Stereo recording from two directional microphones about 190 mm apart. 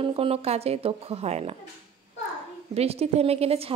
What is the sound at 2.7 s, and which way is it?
Speech, 35° right (ahead or behind).